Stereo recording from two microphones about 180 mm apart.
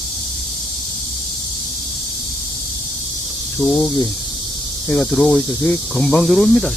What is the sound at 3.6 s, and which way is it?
Speech, 5° left (ahead or behind).